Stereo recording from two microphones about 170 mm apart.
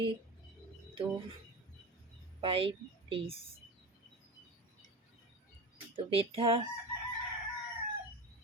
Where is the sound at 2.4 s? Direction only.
30° right (ahead or behind).